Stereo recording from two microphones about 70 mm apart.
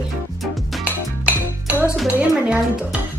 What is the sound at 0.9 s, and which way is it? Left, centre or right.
Music, right.